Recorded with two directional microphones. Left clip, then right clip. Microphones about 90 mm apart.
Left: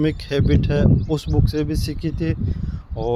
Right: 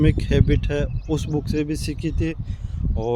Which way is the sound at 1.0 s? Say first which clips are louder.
Left 2 dB; 45° right (ahead or behind).